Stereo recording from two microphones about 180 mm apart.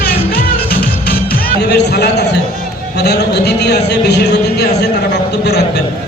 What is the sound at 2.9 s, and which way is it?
A man's voice, 65° left (ahead or behind).